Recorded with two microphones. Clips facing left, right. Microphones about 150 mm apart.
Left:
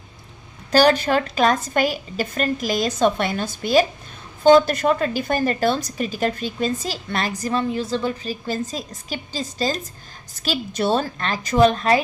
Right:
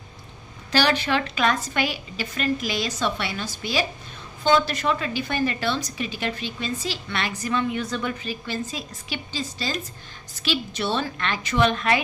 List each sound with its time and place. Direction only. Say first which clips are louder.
0.7 s a woman's voice: left 6 dB; 45° left (ahead or behind)